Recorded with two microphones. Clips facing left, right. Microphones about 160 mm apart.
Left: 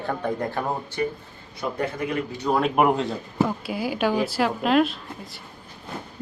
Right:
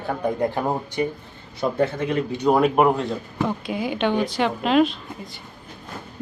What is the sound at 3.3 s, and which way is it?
Speech, 5° left (ahead or behind).